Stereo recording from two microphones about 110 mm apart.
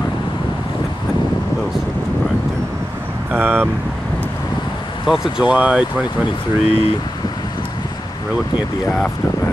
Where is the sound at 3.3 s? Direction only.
15° right (ahead or behind).